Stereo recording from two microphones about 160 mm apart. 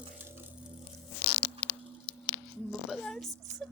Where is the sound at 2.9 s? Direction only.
5° left (ahead or behind).